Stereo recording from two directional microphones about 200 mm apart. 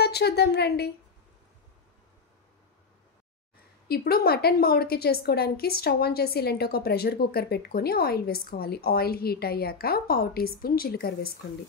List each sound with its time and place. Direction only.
0.0 s a woman's voice: 55° left (ahead or behind)
3.9 s a woman's voice: 50° left (ahead or behind)